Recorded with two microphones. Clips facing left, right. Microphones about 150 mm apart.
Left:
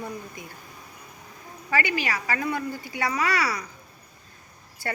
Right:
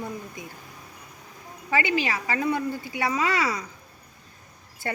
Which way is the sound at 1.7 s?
20° right (ahead or behind).